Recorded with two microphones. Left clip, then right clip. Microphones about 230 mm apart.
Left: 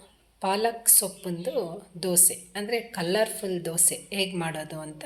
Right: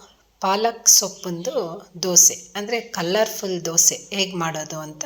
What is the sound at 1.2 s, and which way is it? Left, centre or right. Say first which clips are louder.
Speech: right 5 dB; right.